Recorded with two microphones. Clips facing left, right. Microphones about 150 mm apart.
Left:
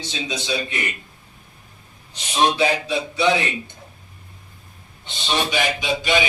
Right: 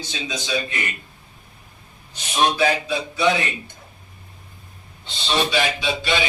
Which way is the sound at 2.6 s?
30° left (ahead or behind).